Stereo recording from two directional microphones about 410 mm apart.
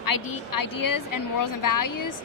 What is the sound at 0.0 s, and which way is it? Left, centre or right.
Speech, left.